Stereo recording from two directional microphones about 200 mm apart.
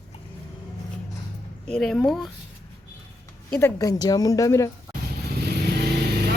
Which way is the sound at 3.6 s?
15° left (ahead or behind).